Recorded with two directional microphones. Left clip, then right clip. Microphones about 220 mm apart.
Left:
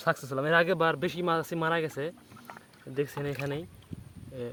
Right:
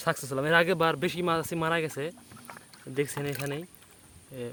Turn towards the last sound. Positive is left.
turn(degrees=-5)  # may be behind; listen again after turning